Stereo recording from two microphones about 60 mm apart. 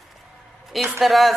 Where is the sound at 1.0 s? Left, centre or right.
Centre.